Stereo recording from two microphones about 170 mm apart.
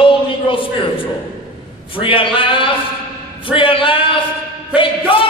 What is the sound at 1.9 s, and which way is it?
A man's voice, 30° left (ahead or behind).